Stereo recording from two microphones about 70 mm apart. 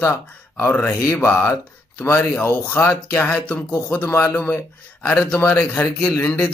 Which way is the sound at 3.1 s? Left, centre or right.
Left.